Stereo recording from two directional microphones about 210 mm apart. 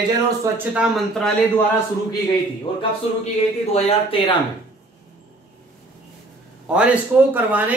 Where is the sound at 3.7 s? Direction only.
25° left (ahead or behind).